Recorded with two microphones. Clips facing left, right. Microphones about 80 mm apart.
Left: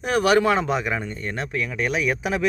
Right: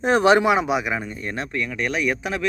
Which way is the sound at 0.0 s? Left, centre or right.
Right.